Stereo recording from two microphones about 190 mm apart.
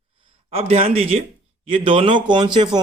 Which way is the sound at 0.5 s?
30° right (ahead or behind).